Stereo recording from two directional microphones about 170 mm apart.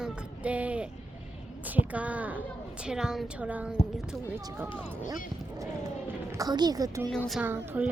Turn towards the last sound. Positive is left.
turn(degrees=-10)  # may be behind; listen again after turning